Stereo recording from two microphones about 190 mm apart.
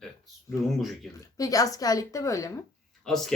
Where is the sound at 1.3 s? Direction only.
20° left (ahead or behind).